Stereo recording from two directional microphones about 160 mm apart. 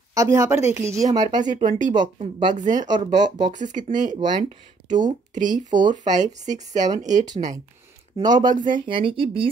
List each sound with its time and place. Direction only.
0.1 s speech: 20° right (ahead or behind)
1.6 s speech: 50° right (ahead or behind)
2.0 s speech: 30° right (ahead or behind)
2.5 s speech: 50° right (ahead or behind)
3.3 s speech: 30° right (ahead or behind)
3.5 s speech: 50° right (ahead or behind)
8.2 s speech: 25° right (ahead or behind)